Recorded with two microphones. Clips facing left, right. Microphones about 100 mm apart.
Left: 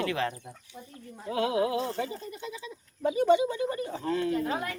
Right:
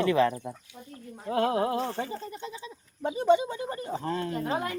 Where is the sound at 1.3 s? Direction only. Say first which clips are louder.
Right 1 dB; 45° right (ahead or behind).